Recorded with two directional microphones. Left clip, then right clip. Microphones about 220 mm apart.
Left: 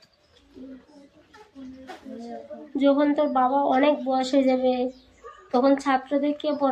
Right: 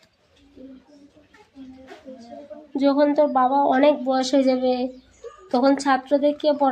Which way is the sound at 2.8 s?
25° right (ahead or behind).